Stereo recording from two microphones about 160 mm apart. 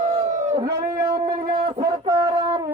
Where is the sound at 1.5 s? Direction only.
25° right (ahead or behind).